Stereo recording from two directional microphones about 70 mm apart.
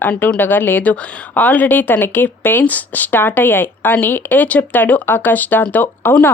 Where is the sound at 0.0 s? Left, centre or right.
Left.